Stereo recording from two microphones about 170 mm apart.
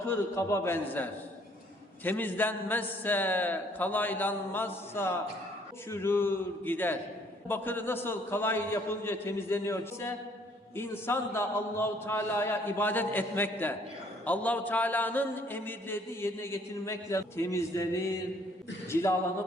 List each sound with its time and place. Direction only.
0.1 s a man's voice: 15° left (ahead or behind)